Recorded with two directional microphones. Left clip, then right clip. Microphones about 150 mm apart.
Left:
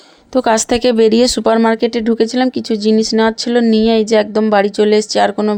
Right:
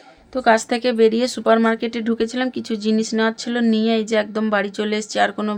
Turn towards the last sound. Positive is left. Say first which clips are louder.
# left 6 dB
turn(degrees=35)  # may be behind; listen again after turning